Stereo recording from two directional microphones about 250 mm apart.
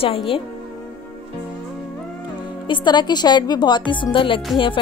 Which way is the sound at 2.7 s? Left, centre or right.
Centre.